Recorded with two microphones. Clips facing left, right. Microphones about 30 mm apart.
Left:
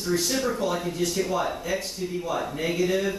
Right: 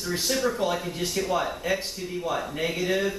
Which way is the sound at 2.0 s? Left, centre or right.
Centre.